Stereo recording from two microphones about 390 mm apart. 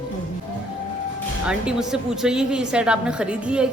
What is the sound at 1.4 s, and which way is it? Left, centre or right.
A woman's voice, centre.